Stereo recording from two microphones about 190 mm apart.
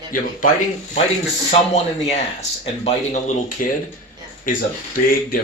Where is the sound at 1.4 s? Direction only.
35° left (ahead or behind).